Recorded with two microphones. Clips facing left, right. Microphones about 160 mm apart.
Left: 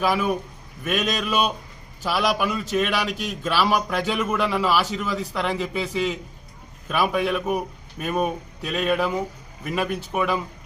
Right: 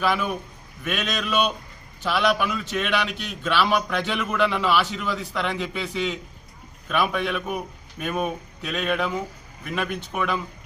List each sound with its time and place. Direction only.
0.0 s a man's voice: 5° left (ahead or behind)